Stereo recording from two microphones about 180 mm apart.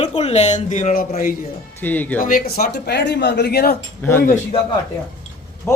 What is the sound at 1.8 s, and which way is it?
Speech, 10° left (ahead or behind).